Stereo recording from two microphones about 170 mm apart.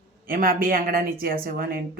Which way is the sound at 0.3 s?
60° right (ahead or behind).